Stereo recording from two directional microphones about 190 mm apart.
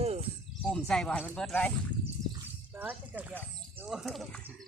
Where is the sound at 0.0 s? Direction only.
35° right (ahead or behind).